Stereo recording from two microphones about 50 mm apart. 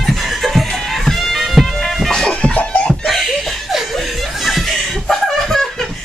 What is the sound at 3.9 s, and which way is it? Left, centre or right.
Chuckle, centre.